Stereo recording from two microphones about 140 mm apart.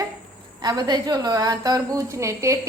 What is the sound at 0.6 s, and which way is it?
A woman's voice, 30° right (ahead or behind).